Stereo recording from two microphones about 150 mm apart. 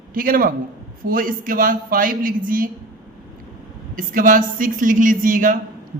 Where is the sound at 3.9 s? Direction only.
65° right (ahead or behind).